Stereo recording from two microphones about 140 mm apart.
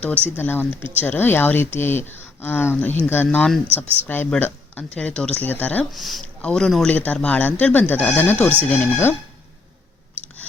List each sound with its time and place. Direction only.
0.3 s speech: 15° left (ahead or behind)
3.2 s speech: 5° left (ahead or behind)
3.8 s speech: 15° left (ahead or behind)
5.9 s speech: centre (ahead or behind); by 9.1 s 15° left (ahead or behind)